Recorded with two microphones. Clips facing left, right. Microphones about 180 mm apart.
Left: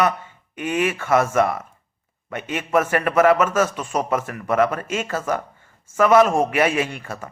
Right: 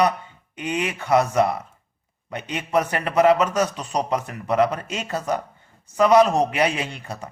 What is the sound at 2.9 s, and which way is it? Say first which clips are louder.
A man's voice: left 1 dB; 25° right (ahead or behind).